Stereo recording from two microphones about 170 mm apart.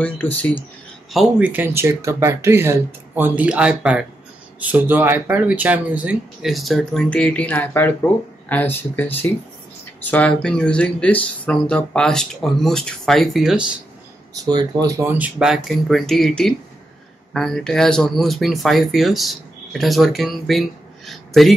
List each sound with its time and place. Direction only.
1.1 s speech: 5° right (ahead or behind)
14.4 s speech: 25° right (ahead or behind)
15.0 s speech: 10° right (ahead or behind)